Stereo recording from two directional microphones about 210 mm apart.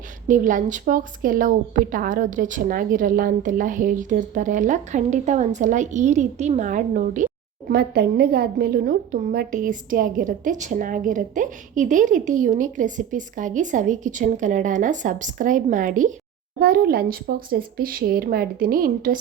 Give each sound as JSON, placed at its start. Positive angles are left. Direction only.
{"t": 0.3, "sound": "a woman's voice", "side_deg": -40}
{"t": 7.7, "sound": "a woman's voice", "side_deg": -50}